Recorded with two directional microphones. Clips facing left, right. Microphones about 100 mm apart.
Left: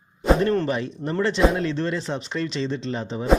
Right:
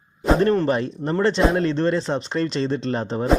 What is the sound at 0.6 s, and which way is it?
Speech, 40° right (ahead or behind).